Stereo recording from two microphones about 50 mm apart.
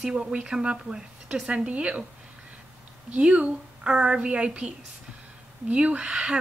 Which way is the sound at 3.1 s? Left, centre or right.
Right.